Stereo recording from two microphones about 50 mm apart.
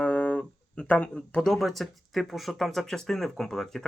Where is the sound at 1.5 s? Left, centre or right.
Centre.